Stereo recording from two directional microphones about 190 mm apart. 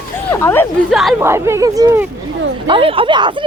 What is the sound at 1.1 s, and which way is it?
Speech, 15° right (ahead or behind).